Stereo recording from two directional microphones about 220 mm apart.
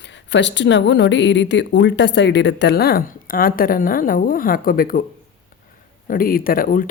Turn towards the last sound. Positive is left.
turn(degrees=40)  # may be behind; listen again after turning